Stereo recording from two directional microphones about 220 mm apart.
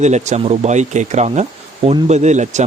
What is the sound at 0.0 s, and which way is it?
Speech, 30° right (ahead or behind).